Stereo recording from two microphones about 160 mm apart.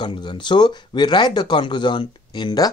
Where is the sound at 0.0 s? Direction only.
30° left (ahead or behind).